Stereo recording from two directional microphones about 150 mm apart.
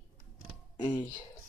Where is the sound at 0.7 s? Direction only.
30° left (ahead or behind).